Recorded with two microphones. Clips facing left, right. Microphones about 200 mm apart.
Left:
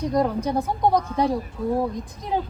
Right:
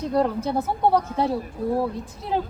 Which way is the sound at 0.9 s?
15° left (ahead or behind).